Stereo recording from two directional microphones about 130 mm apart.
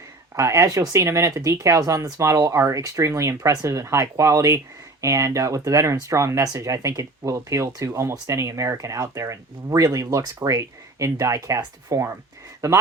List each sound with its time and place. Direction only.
0.3 s speech: 25° right (ahead or behind)